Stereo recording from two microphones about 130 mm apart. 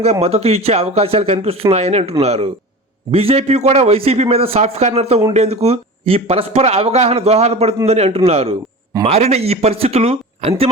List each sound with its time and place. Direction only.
0.0 s a man's voice: 55° right (ahead or behind)